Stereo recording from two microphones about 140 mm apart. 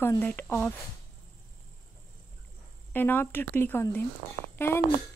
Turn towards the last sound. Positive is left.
turn(degrees=15)  # may be behind; listen again after turning